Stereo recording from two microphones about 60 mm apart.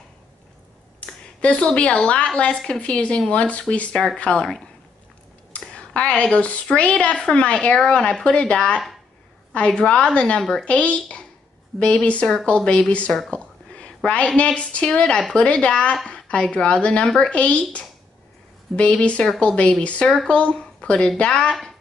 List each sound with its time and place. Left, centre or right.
1.4 s a woman's voice: centre
3.9 s a woman's voice: centre